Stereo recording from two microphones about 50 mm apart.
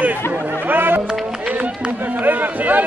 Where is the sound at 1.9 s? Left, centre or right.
Right.